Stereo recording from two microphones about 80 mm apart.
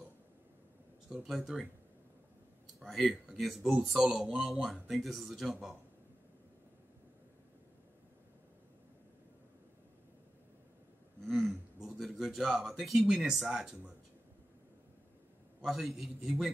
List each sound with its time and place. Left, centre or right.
1.0 s speech: centre
2.8 s speech: centre
11.2 s speech: centre
15.6 s speech: centre